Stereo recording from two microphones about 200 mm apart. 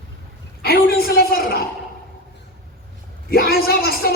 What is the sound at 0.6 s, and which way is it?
A woman's voice, 50° left (ahead or behind).